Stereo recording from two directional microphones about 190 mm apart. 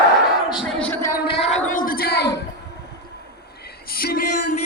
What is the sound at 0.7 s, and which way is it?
Speech, 10° left (ahead or behind).